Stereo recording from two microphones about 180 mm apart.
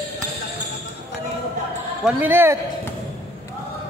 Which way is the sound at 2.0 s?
10° right (ahead or behind).